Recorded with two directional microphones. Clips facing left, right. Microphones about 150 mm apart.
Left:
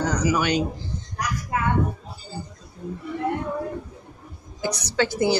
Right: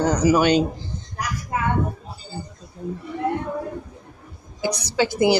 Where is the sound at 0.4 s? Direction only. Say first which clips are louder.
Right 5 dB; 25° right (ahead or behind).